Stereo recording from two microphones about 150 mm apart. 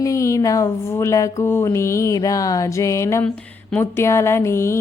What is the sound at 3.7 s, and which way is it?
A woman's voice, 20° left (ahead or behind).